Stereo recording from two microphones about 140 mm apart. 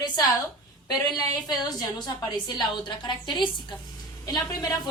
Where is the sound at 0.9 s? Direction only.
30° left (ahead or behind).